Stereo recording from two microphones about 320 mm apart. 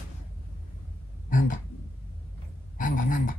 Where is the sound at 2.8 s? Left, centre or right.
Left.